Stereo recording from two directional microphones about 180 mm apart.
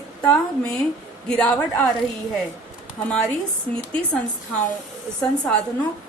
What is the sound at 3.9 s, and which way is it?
Speech, 5° left (ahead or behind).